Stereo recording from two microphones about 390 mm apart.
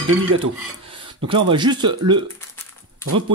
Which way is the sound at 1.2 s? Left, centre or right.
Centre.